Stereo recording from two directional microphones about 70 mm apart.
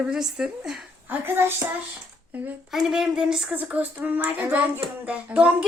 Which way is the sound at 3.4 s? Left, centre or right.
Right.